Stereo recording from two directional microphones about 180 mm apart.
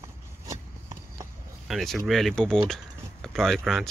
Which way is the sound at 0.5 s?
20° right (ahead or behind).